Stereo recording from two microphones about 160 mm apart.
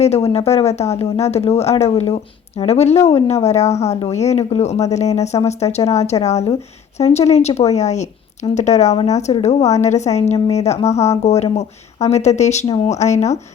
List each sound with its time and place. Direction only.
0.0 s speech: 40° left (ahead or behind)